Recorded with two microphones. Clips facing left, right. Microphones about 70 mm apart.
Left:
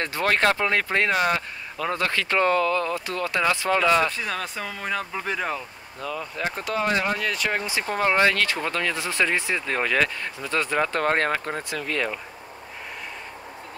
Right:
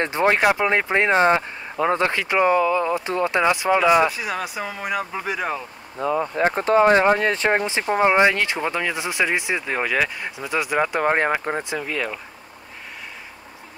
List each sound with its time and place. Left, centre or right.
0.0 s speech: right
5.9 s speech: right
11.8 s speech: centre